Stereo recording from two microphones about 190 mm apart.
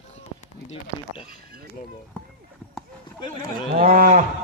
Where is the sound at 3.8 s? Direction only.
45° right (ahead or behind).